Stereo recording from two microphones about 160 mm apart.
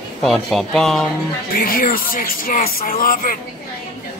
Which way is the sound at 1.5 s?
65° left (ahead or behind).